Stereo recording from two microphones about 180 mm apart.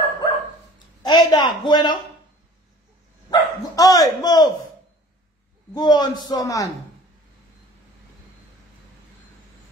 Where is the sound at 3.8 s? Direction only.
20° left (ahead or behind).